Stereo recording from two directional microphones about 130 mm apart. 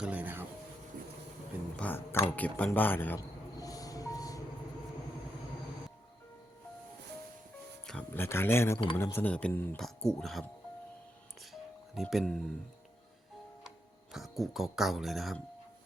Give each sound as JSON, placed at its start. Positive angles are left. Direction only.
{"t": 0.0, "sound": "music", "side_deg": -10}
{"t": 1.0, "sound": "vehicle", "side_deg": -90}
{"t": 1.7, "sound": "speech", "side_deg": 10}
{"t": 3.2, "sound": "music", "side_deg": 30}
{"t": 7.9, "sound": "speech", "side_deg": 10}
{"t": 12.1, "sound": "speech", "side_deg": 5}
{"t": 13.7, "sound": "speech", "side_deg": 0}